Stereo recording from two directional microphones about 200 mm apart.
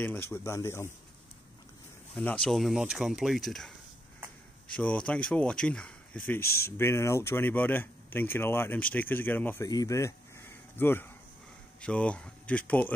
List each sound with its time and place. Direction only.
0.0 s speech: 10° left (ahead or behind)
2.1 s speech: 5° left (ahead or behind)
4.7 s speech: 5° left (ahead or behind)
6.4 s speech: 50° left (ahead or behind)
6.8 s speech: 15° left (ahead or behind)